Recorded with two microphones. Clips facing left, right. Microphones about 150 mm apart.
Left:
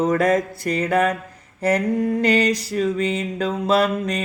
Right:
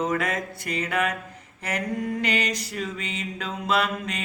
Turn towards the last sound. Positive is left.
turn(degrees=35)  # may be behind; listen again after turning